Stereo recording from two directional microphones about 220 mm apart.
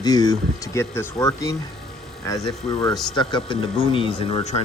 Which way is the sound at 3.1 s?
20° left (ahead or behind).